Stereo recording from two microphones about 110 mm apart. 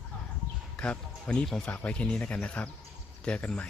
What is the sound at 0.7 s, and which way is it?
Speech, 10° left (ahead or behind).